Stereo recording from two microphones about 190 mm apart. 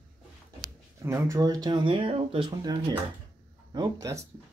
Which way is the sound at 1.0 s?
15° right (ahead or behind).